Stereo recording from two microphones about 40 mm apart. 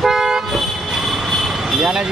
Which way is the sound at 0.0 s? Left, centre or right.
Centre.